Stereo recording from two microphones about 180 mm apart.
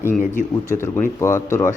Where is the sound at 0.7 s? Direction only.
15° left (ahead or behind).